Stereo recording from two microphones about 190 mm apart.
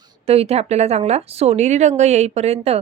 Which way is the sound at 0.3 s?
30° right (ahead or behind).